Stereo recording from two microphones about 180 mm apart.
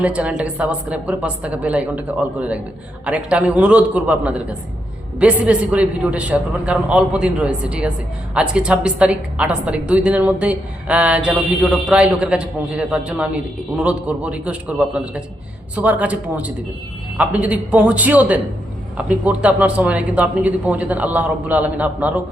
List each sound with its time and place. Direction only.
0.0 s a woman's voice: 5° right (ahead or behind)